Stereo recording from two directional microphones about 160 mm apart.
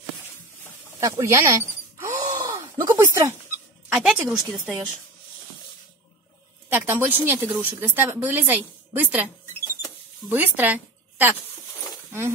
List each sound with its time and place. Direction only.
1.0 s gasp: 20° right (ahead or behind)
3.9 s a woman's voice: 10° right (ahead or behind)
6.7 s a woman's voice: 10° right (ahead or behind)
10.3 s a woman's voice: 10° right (ahead or behind)